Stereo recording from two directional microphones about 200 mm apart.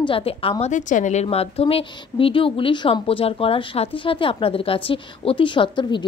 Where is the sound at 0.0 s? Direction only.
25° left (ahead or behind).